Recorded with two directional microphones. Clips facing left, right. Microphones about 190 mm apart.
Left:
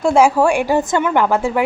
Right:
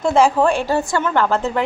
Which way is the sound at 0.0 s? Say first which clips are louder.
Left 2 dB; 10° left (ahead or behind).